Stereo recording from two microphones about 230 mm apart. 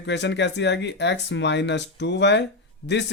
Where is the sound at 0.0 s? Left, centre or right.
Left.